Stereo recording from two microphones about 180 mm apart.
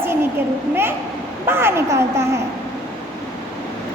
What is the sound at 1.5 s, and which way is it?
Speech, 15° right (ahead or behind).